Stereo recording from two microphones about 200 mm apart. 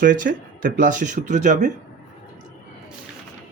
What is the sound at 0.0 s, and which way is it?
Speech, 40° right (ahead or behind).